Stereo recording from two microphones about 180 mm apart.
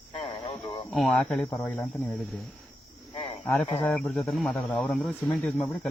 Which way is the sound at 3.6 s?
5° left (ahead or behind).